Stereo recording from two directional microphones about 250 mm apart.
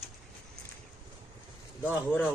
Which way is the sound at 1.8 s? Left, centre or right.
Centre.